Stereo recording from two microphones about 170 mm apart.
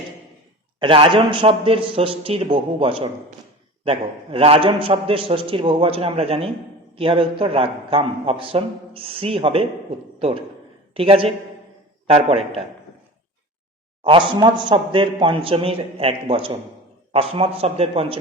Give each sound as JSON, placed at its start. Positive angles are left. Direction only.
{"t": 0.8, "sound": "a man's voice", "side_deg": -30}
{"t": 10.9, "sound": "a man's voice", "side_deg": -35}
{"t": 14.0, "sound": "a man's voice", "side_deg": -30}